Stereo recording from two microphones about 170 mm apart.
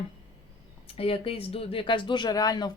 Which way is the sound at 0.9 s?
35° left (ahead or behind).